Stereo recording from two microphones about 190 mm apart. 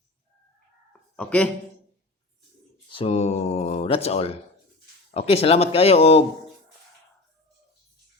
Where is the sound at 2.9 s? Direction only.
30° left (ahead or behind).